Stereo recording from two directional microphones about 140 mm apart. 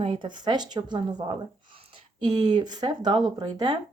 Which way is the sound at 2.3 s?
30° right (ahead or behind).